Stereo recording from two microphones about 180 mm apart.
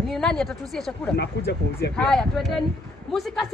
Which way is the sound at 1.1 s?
70° left (ahead or behind).